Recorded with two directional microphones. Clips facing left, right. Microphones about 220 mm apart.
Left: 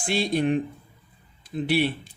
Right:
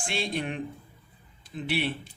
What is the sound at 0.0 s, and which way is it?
Speech, 40° left (ahead or behind).